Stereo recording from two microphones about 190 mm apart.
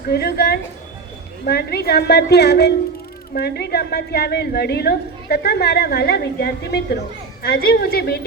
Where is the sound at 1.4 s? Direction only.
60° left (ahead or behind).